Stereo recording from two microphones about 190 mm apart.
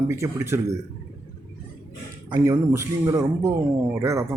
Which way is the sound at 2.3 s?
20° right (ahead or behind).